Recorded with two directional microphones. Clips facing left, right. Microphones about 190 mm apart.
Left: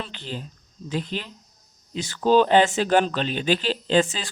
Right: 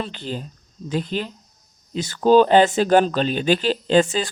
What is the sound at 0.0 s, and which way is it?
Speech, 40° right (ahead or behind).